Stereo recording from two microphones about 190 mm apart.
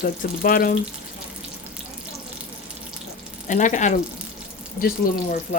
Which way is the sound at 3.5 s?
40° left (ahead or behind).